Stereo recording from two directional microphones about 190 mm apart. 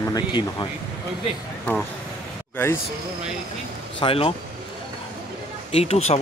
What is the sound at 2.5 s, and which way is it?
Speech, 15° left (ahead or behind).